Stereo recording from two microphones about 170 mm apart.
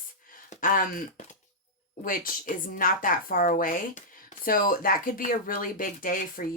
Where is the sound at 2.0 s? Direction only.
55° left (ahead or behind).